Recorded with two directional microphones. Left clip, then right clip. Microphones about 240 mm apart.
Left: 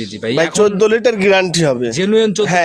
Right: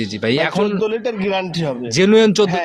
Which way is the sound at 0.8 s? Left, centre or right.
Left.